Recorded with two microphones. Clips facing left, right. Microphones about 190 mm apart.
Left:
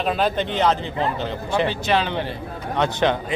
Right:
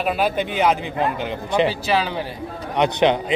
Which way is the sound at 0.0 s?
10° right (ahead or behind).